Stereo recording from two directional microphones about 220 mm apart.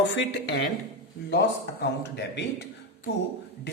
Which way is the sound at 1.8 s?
55° left (ahead or behind).